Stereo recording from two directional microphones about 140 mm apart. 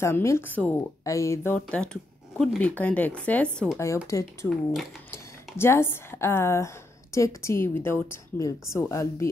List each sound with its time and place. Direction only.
0.0 s speech: 20° left (ahead or behind)
1.0 s speech: 20° left (ahead or behind)
3.7 s speech: 20° left (ahead or behind)